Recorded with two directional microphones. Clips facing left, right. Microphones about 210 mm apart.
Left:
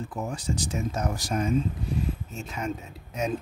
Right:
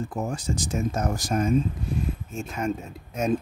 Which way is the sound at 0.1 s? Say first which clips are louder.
Right 2 dB; 45° right (ahead or behind).